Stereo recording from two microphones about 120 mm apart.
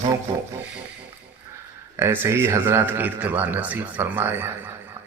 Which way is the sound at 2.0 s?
20° right (ahead or behind).